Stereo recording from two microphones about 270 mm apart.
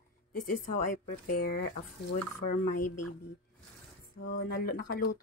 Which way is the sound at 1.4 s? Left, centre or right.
Left.